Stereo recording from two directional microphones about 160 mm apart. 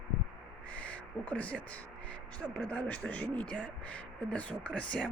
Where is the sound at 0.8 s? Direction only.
10° left (ahead or behind).